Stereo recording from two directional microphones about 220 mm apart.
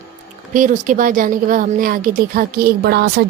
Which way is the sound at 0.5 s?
35° right (ahead or behind).